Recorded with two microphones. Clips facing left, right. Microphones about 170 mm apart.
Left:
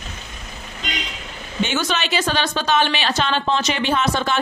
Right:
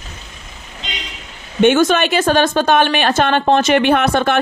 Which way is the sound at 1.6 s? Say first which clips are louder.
Right 11 dB; 50° right (ahead or behind).